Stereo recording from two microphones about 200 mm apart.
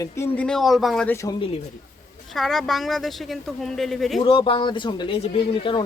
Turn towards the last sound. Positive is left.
turn(degrees=25)  # may be behind; listen again after turning